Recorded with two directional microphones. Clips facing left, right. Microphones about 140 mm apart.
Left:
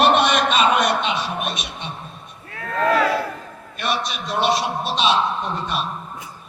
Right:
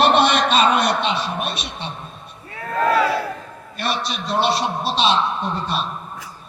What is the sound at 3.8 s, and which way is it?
A man's voice, 35° right (ahead or behind).